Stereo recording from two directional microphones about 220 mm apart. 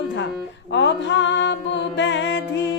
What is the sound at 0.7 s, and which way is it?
Mantra, 55° left (ahead or behind).